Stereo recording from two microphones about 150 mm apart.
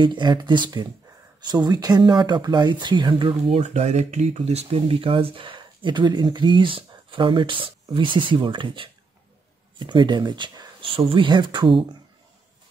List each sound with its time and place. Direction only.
0.0 s speech: 30° right (ahead or behind)